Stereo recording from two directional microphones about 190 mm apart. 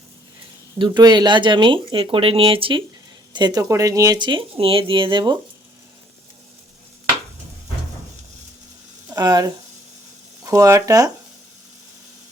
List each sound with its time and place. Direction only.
0.8 s speech: 25° right (ahead or behind)
9.1 s speech: 20° right (ahead or behind)